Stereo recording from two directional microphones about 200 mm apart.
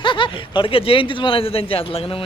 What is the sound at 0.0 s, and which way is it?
Speech, 25° left (ahead or behind).